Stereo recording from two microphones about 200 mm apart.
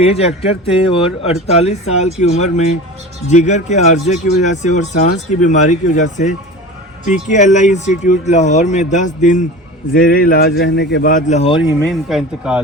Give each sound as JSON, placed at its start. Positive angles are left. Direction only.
{"t": 0.0, "sound": "speech", "side_deg": 30}
{"t": 11.9, "sound": "speech", "side_deg": 0}